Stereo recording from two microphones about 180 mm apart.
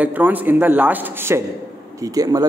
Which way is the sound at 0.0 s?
10° right (ahead or behind).